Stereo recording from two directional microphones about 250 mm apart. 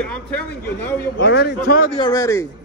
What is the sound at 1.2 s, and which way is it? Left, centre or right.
Speech, left.